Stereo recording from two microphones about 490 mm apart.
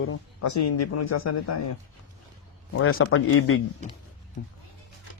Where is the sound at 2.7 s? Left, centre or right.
Left.